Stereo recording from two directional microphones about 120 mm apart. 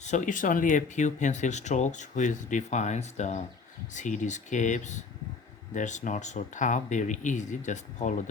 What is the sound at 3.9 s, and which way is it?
Speech, 90° left.